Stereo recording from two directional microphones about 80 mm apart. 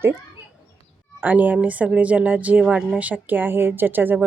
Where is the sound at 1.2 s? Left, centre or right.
Right.